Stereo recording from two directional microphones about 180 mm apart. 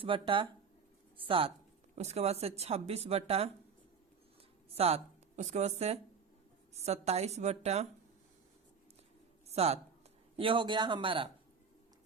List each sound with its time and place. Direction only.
0.0 s a man's voice: 30° right (ahead or behind)
4.7 s speech: 35° right (ahead or behind)
9.5 s a man's voice: 35° right (ahead or behind)